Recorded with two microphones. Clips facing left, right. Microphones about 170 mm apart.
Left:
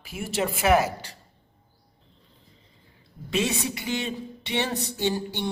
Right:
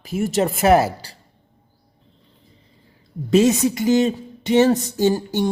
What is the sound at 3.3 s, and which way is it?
Speech, 40° right (ahead or behind).